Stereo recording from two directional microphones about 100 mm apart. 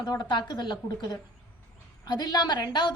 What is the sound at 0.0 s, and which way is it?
A woman's voice, 45° left (ahead or behind).